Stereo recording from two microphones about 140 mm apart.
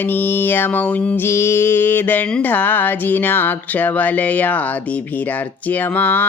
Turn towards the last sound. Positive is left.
turn(degrees=10)  # may be behind; listen again after turning